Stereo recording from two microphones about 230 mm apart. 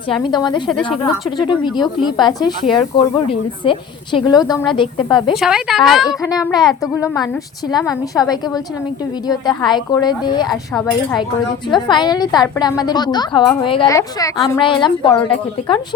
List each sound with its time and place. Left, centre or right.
0.1 s speech: centre
5.3 s speech: centre
6.1 s a woman's voice: centre
10.5 s speech: centre
11.7 s a woman's voice: centre